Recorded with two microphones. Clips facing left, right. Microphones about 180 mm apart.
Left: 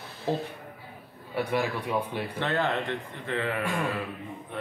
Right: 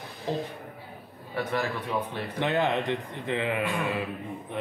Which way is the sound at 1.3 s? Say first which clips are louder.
Left 1 dB; 10° left (ahead or behind).